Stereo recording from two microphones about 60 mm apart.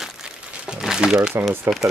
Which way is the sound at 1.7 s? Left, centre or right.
Right.